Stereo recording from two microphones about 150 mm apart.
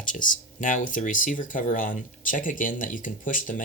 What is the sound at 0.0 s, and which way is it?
Speech, 60° left (ahead or behind).